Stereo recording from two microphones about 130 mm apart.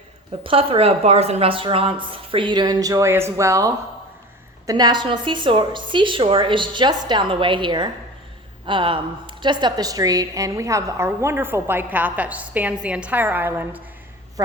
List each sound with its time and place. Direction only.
0.4 s a woman's voice: 45° right (ahead or behind); by 13.8 s 15° right (ahead or behind)
14.4 s a woman's voice: 25° right (ahead or behind)